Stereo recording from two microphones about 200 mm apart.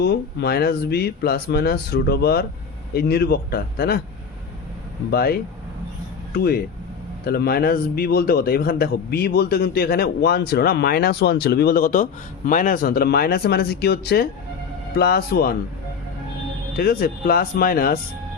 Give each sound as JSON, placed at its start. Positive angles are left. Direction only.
{"t": 0.0, "sound": "a man's voice", "side_deg": 55}
{"t": 5.1, "sound": "a man's voice", "side_deg": 50}
{"t": 16.7, "sound": "a man's voice", "side_deg": 50}